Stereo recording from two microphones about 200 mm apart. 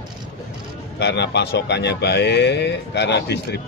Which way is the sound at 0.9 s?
60° left (ahead or behind).